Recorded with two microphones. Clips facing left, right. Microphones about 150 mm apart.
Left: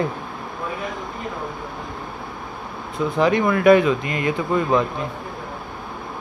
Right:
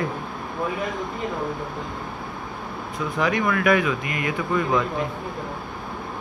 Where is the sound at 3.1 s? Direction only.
30° left (ahead or behind).